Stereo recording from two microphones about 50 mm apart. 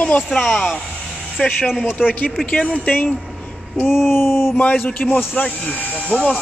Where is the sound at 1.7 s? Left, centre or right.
Centre.